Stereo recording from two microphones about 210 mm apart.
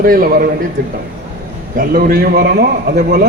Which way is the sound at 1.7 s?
45° right (ahead or behind).